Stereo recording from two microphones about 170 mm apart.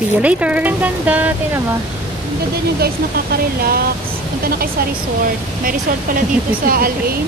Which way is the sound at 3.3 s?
65° right (ahead or behind).